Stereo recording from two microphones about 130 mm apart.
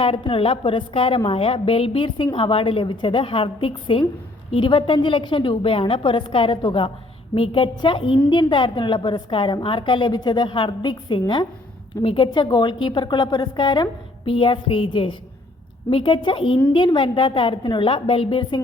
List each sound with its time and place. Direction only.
0.0 s a woman's voice: 45° left (ahead or behind)